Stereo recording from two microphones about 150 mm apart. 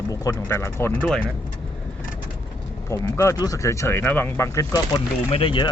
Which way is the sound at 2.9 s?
20° left (ahead or behind).